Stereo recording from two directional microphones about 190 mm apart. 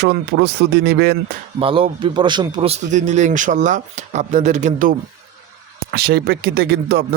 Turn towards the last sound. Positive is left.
turn(degrees=-55)  # may be behind; listen again after turning